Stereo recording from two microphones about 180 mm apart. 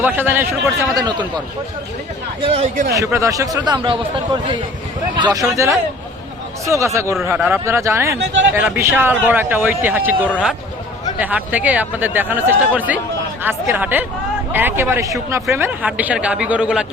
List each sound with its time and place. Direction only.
0.0 s speech: 10° right (ahead or behind)
2.4 s speech: 35° right (ahead or behind)
2.9 s a man's voice: 15° right (ahead or behind)
6.7 s speech: 15° right (ahead or behind)
7.3 s speech: centre (ahead or behind)
7.5 s speech: 15° right (ahead or behind)